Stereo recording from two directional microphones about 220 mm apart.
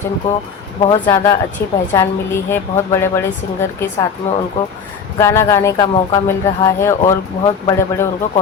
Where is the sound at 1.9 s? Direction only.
10° left (ahead or behind).